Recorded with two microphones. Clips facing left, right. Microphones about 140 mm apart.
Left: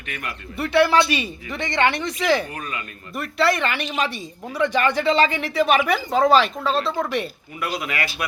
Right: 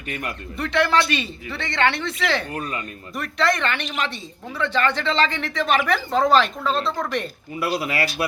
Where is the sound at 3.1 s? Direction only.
5° left (ahead or behind).